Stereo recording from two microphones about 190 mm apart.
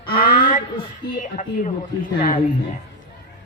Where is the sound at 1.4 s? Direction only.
40° left (ahead or behind).